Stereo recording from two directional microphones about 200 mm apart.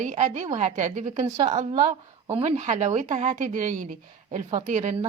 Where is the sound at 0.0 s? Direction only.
40° right (ahead or behind).